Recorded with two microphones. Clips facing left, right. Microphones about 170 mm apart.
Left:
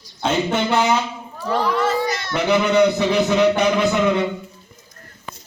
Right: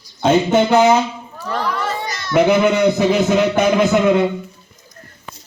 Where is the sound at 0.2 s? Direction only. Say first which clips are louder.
Right 6 dB; 40° right (ahead or behind).